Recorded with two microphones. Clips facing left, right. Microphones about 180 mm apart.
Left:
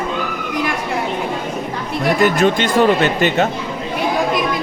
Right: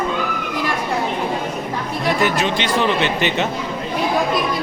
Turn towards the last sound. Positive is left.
turn(degrees=45)  # may be behind; listen again after turning